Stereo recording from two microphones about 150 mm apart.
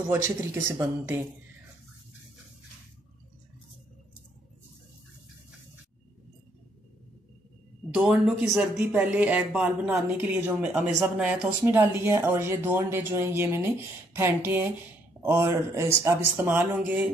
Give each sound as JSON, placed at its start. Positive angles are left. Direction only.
{"t": 0.7, "sound": "speech", "side_deg": -15}
{"t": 7.9, "sound": "speech", "side_deg": -5}